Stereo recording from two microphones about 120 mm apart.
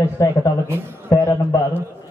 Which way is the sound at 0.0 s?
20° left (ahead or behind).